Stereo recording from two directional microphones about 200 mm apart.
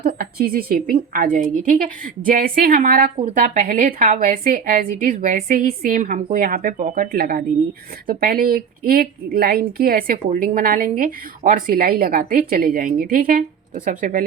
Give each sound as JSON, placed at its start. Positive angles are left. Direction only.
{"t": 0.0, "sound": "a woman's voice", "side_deg": -45}